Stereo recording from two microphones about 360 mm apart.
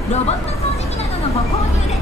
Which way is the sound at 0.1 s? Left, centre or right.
Centre.